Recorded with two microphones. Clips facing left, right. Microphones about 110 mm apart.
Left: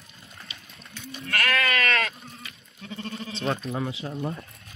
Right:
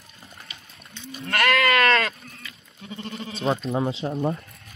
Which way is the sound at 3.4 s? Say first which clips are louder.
Right 5 dB; 30° right (ahead or behind).